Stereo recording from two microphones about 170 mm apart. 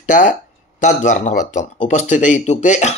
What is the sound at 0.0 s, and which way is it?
Speech, 50° left (ahead or behind).